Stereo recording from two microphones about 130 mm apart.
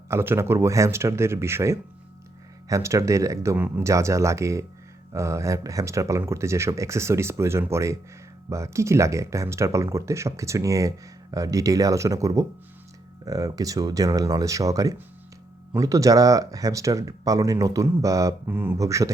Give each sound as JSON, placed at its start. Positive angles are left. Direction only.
{"t": 0.1, "sound": "speech", "side_deg": -20}